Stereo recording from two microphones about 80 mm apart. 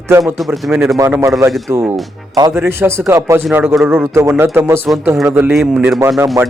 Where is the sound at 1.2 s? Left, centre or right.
Right.